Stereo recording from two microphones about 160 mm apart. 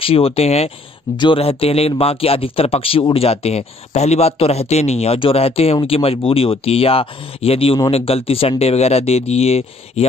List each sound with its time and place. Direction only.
0.0 s a man's voice: 35° left (ahead or behind)